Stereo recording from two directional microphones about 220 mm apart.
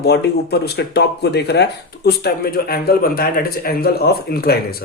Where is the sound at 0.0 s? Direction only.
50° left (ahead or behind).